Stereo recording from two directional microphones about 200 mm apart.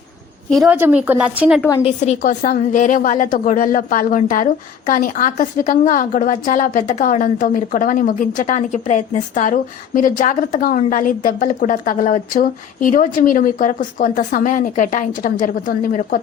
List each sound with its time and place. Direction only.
0.5 s a woman's voice: centre (ahead or behind)
1.8 s a woman's voice: 35° left (ahead or behind)